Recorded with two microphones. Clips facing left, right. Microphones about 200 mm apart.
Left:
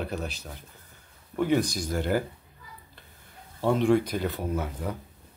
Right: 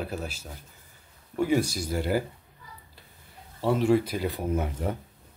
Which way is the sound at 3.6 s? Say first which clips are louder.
Even; 5° right (ahead or behind).